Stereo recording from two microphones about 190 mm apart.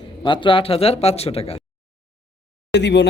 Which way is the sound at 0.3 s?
25° left (ahead or behind).